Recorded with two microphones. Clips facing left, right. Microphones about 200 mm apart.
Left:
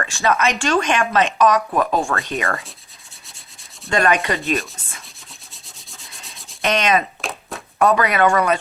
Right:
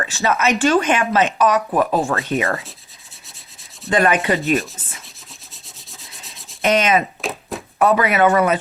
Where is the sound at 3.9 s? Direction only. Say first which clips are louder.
Right 1 dB; 5° right (ahead or behind).